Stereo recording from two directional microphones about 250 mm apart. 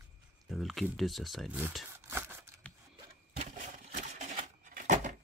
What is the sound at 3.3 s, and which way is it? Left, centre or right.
Sewing machine, right.